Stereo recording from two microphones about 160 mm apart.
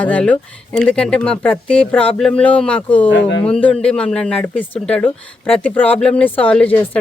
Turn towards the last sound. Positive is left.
turn(degrees=10)  # may be behind; listen again after turning